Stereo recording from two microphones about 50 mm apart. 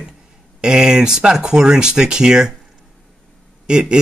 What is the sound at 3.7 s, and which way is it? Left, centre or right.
Speech, centre.